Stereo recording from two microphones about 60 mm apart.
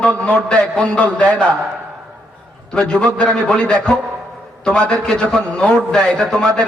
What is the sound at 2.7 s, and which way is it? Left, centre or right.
A man's voice, centre.